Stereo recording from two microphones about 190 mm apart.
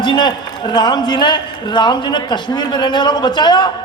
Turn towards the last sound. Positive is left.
turn(degrees=20)  # may be behind; listen again after turning